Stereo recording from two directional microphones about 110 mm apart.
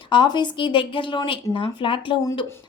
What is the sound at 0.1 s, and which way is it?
A woman's voice, 45° left (ahead or behind).